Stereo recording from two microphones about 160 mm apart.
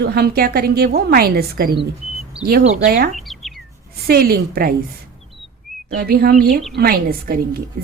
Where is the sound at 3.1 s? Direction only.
Centre (ahead or behind).